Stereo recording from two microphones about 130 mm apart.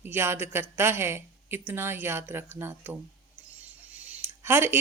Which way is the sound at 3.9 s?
10° right (ahead or behind).